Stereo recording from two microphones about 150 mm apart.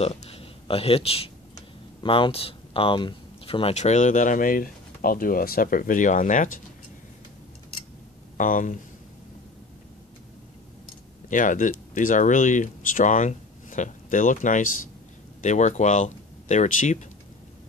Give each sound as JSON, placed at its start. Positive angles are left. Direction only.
{"t": 0.0, "sound": "speech", "side_deg": 45}
{"t": 8.4, "sound": "speech", "side_deg": 60}
{"t": 11.2, "sound": "speech", "side_deg": 60}